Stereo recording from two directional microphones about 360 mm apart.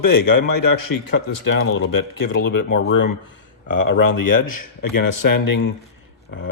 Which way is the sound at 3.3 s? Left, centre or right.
Left.